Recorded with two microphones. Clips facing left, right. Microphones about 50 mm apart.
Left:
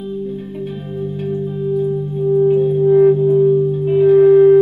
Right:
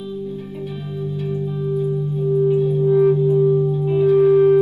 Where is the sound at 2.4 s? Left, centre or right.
Left.